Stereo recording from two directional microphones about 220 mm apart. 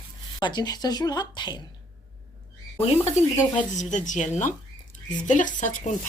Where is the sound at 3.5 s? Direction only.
35° left (ahead or behind).